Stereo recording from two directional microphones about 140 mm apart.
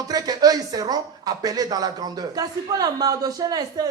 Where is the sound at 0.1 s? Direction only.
25° right (ahead or behind).